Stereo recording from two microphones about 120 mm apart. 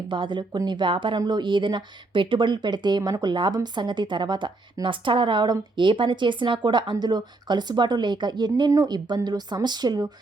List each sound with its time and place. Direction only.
0.1 s speech: 40° right (ahead or behind)